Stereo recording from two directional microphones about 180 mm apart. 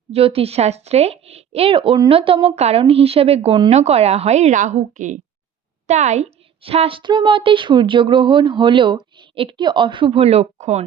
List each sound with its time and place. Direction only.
0.1 s a woman's voice: 30° right (ahead or behind)